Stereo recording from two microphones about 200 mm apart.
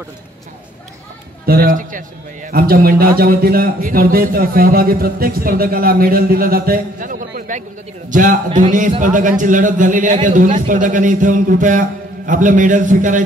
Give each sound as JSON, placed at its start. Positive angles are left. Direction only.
{"t": 1.4, "sound": "a man's voice", "side_deg": -50}